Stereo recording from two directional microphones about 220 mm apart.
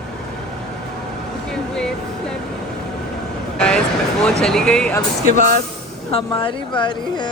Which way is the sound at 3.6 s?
5° left (ahead or behind).